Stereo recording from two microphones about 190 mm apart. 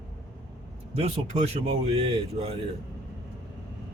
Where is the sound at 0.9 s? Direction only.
30° right (ahead or behind).